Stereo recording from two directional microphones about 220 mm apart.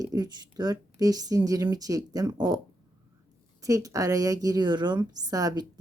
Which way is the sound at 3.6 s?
15° right (ahead or behind).